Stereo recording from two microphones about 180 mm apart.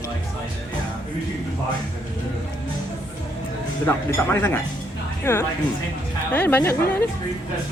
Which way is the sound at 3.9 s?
10° left (ahead or behind).